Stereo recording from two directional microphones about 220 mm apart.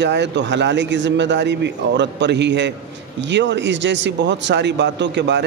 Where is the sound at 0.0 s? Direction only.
50° right (ahead or behind).